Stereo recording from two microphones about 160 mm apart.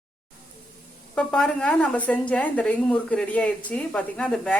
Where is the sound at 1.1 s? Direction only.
5° left (ahead or behind).